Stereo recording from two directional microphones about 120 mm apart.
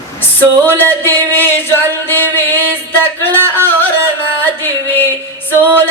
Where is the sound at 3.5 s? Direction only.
15° left (ahead or behind).